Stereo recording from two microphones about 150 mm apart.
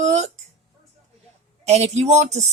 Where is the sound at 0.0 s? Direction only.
50° right (ahead or behind).